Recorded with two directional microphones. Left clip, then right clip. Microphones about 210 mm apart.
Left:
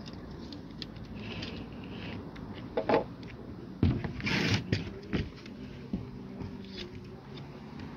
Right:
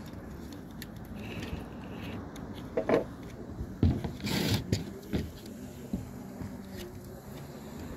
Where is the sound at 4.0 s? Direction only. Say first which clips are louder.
Left 2 dB; 5° right (ahead or behind).